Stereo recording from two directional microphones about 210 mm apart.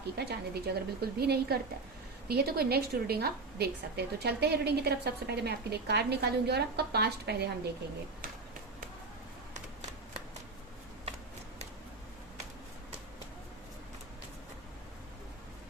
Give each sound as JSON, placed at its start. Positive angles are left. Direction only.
{"t": 0.2, "sound": "a woman's voice", "side_deg": -50}